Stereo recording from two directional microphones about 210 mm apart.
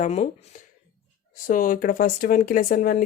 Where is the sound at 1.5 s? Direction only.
40° left (ahead or behind).